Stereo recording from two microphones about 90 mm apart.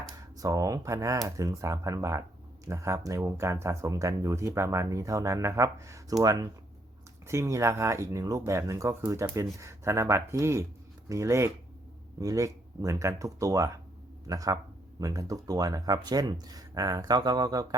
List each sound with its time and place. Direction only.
0.3 s speech: 40° right (ahead or behind)
7.3 s speech: 35° right (ahead or behind)